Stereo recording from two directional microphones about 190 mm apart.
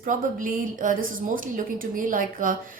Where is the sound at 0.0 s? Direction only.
45° right (ahead or behind).